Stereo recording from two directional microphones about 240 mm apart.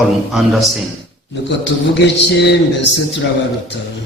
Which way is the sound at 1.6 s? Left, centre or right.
Left.